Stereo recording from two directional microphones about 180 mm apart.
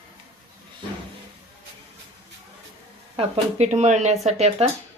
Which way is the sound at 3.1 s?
35° right (ahead or behind).